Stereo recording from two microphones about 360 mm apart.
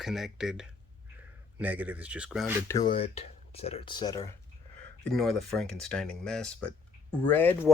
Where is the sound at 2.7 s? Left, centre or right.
Centre.